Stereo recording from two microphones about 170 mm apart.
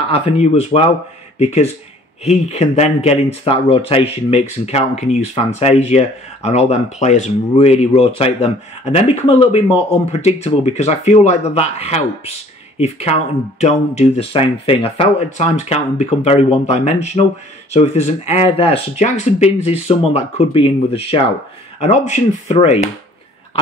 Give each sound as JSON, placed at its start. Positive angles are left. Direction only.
{"t": 0.1, "sound": "speech", "side_deg": 40}